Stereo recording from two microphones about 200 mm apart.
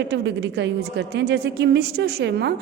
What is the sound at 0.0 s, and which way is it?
A woman's voice, 60° right (ahead or behind).